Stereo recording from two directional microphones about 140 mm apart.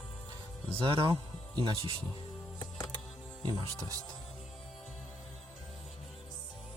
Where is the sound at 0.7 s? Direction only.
40° right (ahead or behind).